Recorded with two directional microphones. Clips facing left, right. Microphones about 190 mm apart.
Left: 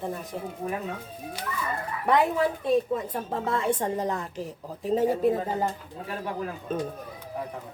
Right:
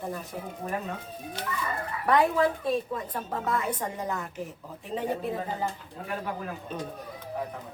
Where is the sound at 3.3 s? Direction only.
25° left (ahead or behind).